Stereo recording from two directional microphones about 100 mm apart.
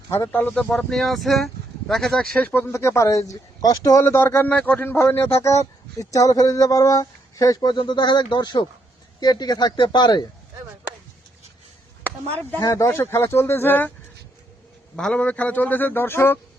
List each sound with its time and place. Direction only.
0.1 s a man's voice: 20° left (ahead or behind)
2.7 s speech: 30° left (ahead or behind)
4.0 s speech: 25° left (ahead or behind)
6.0 s speech: 35° left (ahead or behind)
12.5 s speech: 30° left (ahead or behind)
14.9 s a man's voice: 10° left (ahead or behind)